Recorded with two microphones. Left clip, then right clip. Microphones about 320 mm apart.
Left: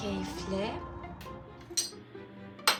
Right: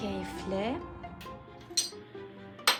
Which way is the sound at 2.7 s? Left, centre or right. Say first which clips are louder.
Right 1 dB; centre.